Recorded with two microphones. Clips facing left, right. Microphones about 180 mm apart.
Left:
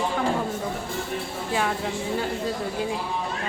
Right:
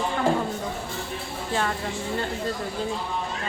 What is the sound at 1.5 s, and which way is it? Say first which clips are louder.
Speech: left 1 dB; 5° left (ahead or behind).